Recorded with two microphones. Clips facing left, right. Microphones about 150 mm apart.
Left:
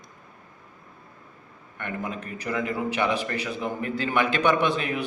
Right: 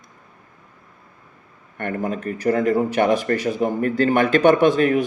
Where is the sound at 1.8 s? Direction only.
45° right (ahead or behind).